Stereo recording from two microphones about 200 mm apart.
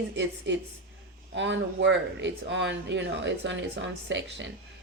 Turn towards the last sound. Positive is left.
turn(degrees=-65)  # may be behind; listen again after turning